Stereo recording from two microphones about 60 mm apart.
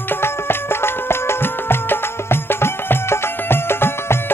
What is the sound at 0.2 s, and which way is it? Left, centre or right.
Music, left.